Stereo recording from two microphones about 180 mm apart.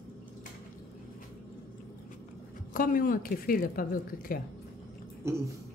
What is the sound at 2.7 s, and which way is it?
Speech, 50° left (ahead or behind).